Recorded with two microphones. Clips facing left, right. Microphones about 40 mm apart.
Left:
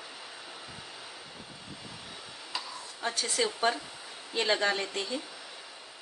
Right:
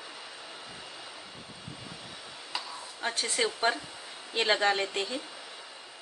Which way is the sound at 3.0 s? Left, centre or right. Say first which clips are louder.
Even; right.